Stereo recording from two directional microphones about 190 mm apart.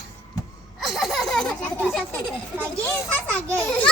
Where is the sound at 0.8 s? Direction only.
Centre (ahead or behind).